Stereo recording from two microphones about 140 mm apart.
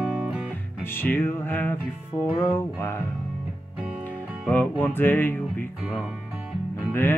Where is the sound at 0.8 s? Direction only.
15° left (ahead or behind).